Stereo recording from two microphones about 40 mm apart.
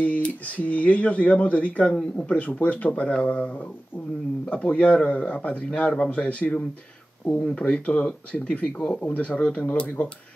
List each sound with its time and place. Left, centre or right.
0.0 s speech: left
4.5 s speech: left